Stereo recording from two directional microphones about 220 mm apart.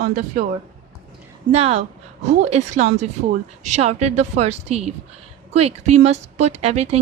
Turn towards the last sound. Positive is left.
turn(degrees=-30)  # may be behind; listen again after turning